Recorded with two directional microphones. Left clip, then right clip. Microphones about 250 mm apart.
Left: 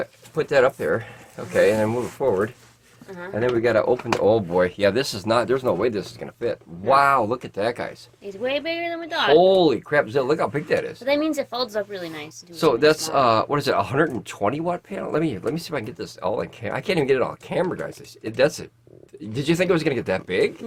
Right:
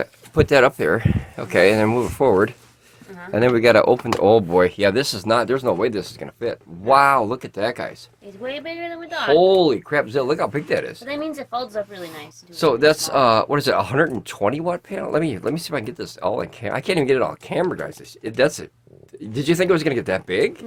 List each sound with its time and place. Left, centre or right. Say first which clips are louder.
0.0 s speech: right 6 dB; right
4.2 s speech: right 5 dB; right; by 7.9 s centre
8.4 s a woman's voice: left 4 dB; left
9.3 s speech: right 1 dB; centre
11.0 s a woman's voice: left 6 dB; left
12.5 s speech: right 2 dB; centre